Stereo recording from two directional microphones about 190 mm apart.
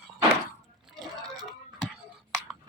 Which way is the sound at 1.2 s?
20° right (ahead or behind).